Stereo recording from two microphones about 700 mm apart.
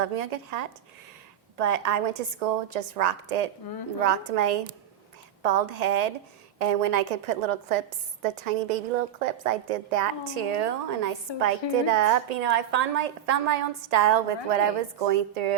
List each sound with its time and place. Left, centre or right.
0.0 s a woman's voice: right